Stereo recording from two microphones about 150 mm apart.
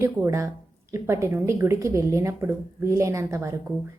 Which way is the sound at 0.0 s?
20° right (ahead or behind).